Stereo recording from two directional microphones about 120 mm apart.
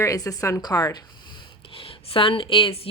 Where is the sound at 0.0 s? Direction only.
30° left (ahead or behind).